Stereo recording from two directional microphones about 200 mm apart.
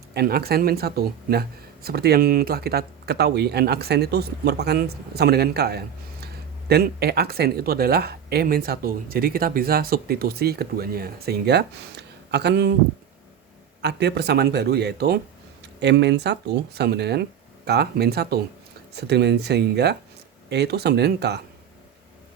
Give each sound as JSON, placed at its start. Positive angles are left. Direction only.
{"t": 0.1, "sound": "speech", "side_deg": -50}
{"t": 13.8, "sound": "speech", "side_deg": -55}